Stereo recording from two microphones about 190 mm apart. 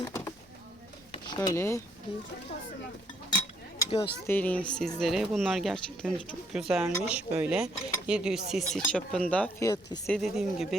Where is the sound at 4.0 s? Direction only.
15° left (ahead or behind).